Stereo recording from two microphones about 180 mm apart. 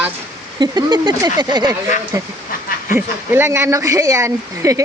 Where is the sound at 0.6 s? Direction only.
25° right (ahead or behind).